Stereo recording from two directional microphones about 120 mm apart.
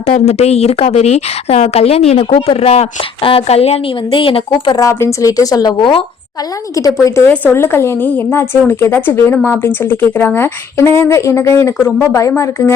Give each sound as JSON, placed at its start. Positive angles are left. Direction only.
{"t": 0.0, "sound": "speech", "side_deg": 65}
{"t": 4.1, "sound": "speech", "side_deg": 45}
{"t": 4.8, "sound": "a woman's voice", "side_deg": 25}
{"t": 6.7, "sound": "a woman's voice", "side_deg": 30}
{"t": 7.3, "sound": "a woman's voice", "side_deg": 15}